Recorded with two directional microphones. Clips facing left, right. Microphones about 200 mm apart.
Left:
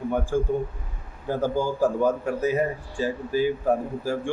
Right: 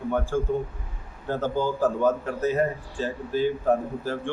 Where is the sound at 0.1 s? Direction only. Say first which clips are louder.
Even; 15° left (ahead or behind).